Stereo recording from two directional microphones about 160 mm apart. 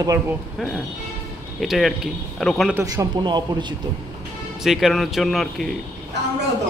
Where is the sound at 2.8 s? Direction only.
20° right (ahead or behind).